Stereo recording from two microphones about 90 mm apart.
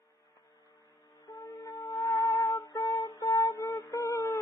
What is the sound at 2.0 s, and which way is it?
Music, 45° left (ahead or behind).